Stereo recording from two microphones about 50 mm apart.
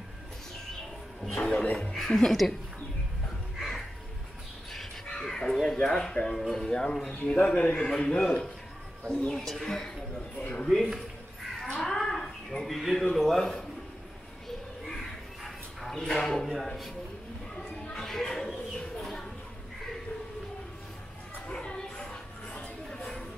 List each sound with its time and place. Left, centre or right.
1.3 s speech: centre
2.0 s speech: centre
3.5 s music: centre
4.7 s crow: centre
5.6 s speech: centre
6.3 s speech: centre
6.6 s speech: centre
7.1 s speech: left; by 10.9 s centre
11.8 s a sound: centre
13.1 s a man's voice: centre
14.9 s bow-wow: centre
16.1 s speech: centre
17.9 s a sound: centre
21.5 s a sound: centre